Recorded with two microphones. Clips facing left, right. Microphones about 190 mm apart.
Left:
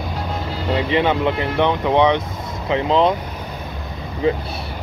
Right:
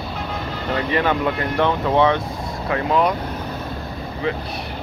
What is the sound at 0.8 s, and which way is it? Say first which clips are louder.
Speech: left 2 dB; 20° left (ahead or behind).